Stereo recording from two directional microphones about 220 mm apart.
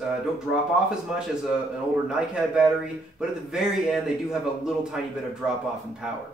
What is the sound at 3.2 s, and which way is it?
Speech, centre (ahead or behind).